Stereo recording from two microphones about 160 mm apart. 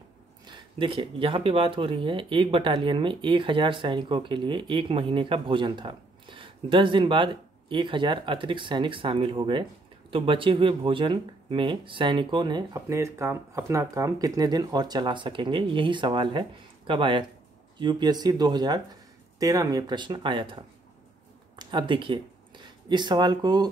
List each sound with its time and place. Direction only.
0.5 s speech: 30° right (ahead or behind)